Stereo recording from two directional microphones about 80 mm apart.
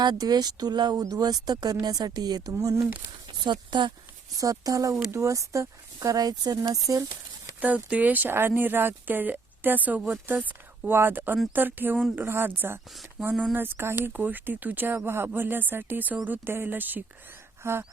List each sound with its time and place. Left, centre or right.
0.0 s speech: right
2.5 s speech: right
3.3 s speech: right
4.4 s speech: right
7.6 s speech: centre